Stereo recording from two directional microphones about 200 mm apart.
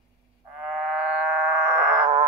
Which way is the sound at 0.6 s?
Centre (ahead or behind).